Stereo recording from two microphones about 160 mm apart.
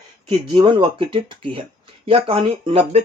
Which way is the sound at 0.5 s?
30° right (ahead or behind).